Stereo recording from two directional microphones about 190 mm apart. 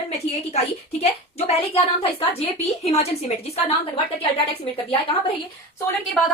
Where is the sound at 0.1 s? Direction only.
35° left (ahead or behind).